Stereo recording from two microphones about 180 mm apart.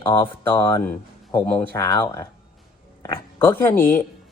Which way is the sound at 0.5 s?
10° left (ahead or behind).